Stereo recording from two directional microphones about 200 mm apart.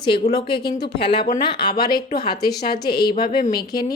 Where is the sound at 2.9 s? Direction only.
50° left (ahead or behind).